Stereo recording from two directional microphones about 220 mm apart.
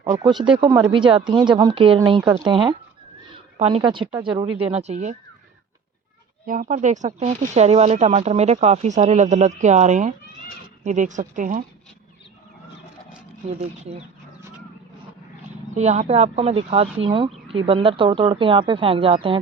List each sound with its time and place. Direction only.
0.0 s a woman's voice: 15° right (ahead or behind)
6.4 s speech: 40° right (ahead or behind)
15.7 s a woman's voice: 30° right (ahead or behind)